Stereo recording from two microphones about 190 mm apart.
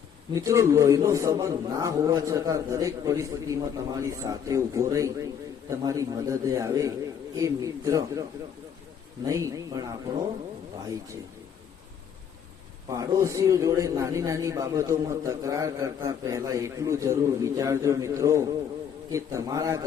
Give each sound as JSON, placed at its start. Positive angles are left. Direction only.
{"t": 0.3, "sound": "a man's voice", "side_deg": -15}
{"t": 9.2, "sound": "a man's voice", "side_deg": -15}
{"t": 12.9, "sound": "a man's voice", "side_deg": -15}